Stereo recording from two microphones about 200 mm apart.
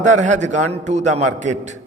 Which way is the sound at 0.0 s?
35° right (ahead or behind).